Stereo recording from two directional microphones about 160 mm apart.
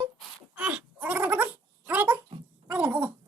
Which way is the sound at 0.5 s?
10° right (ahead or behind).